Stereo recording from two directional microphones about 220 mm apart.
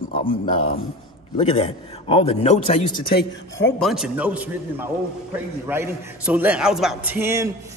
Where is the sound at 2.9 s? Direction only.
45° left (ahead or behind).